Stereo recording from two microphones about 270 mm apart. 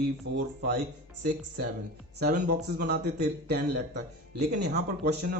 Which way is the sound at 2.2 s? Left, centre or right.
Right.